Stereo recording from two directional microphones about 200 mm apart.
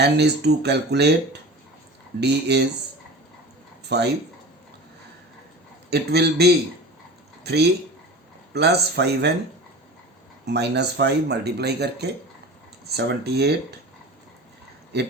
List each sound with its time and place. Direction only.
0.0 s speech: 55° right (ahead or behind)
3.8 s speech: 55° right (ahead or behind)
5.9 s speech: 55° right (ahead or behind)
10.4 s speech: 55° right (ahead or behind)